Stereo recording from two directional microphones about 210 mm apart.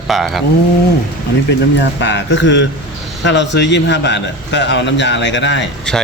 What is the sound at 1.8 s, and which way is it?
A man's voice, 55° left (ahead or behind).